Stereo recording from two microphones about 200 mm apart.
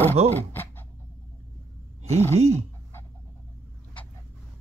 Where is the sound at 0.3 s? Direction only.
10° left (ahead or behind).